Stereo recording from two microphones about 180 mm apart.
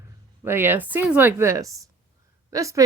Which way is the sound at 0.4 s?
10° right (ahead or behind).